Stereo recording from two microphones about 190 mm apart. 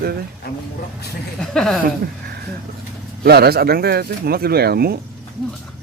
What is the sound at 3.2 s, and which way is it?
Speech, 55° right (ahead or behind).